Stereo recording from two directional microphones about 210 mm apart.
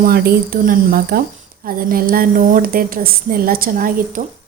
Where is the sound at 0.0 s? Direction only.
45° right (ahead or behind).